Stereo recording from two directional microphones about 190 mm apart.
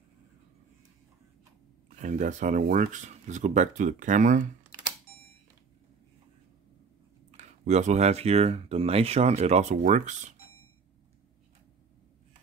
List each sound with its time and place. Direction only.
2.0 s speech: 40° right (ahead or behind)
7.2 s speech: 35° right (ahead or behind)